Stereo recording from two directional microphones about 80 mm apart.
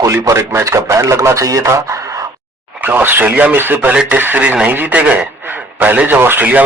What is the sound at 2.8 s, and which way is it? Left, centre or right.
Speech, right.